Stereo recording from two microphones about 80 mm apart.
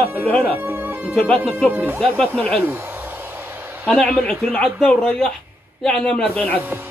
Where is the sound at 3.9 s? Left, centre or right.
Centre.